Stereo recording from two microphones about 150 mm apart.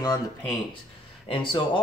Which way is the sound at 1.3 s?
35° left (ahead or behind).